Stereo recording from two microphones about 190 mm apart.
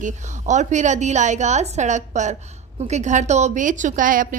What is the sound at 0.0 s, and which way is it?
A woman's voice, 40° right (ahead or behind).